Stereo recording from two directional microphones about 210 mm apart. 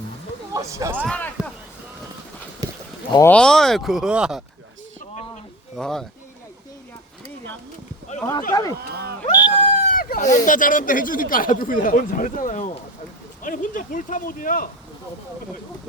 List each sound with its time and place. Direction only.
0.5 s speech: 15° right (ahead or behind)
1.0 s speech: 5° left (ahead or behind)
2.6 s a sound: 15° right (ahead or behind)
3.1 s speech: 15° left (ahead or behind)
3.3 s speech: 5° left (ahead or behind)
5.7 s speech: centre (ahead or behind)
8.5 s speech: 20° left (ahead or behind)
8.9 s a sound: 50° right (ahead or behind)
9.6 s speech: 40° left (ahead or behind)